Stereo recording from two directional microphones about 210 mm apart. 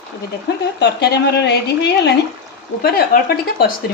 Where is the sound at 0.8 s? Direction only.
55° left (ahead or behind).